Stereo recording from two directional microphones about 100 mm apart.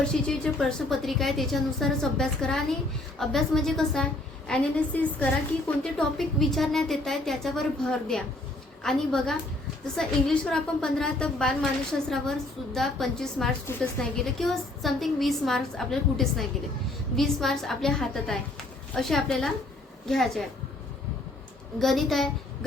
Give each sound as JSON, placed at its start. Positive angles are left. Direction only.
{"t": 0.1, "sound": "a woman's voice", "side_deg": 5}
{"t": 13.7, "sound": "a woman's voice", "side_deg": 25}
{"t": 14.0, "sound": "a woman's voice", "side_deg": 0}
{"t": 21.8, "sound": "a woman's voice", "side_deg": 0}